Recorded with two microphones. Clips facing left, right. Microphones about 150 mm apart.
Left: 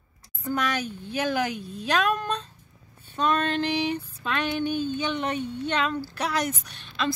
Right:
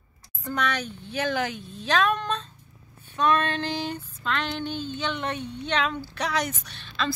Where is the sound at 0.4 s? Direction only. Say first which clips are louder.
Left 1 dB; 5° left (ahead or behind).